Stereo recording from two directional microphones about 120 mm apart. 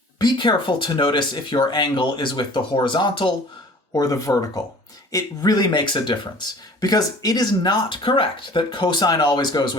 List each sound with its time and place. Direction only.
0.2 s speech: 40° left (ahead or behind)
3.9 s speech: 25° left (ahead or behind)